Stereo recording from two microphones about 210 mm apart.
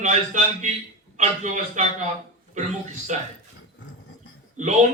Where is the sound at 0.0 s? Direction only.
35° right (ahead or behind).